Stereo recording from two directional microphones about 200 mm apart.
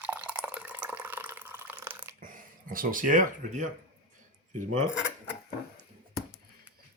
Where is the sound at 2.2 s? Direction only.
45° right (ahead or behind).